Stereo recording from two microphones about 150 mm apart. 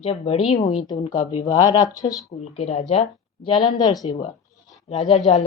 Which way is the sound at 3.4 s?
30° left (ahead or behind).